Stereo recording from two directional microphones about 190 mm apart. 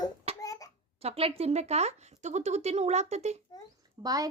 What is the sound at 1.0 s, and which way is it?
Speech, 30° right (ahead or behind).